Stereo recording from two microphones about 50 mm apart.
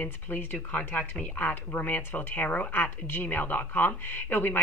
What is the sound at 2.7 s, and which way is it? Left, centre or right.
A woman's voice, left.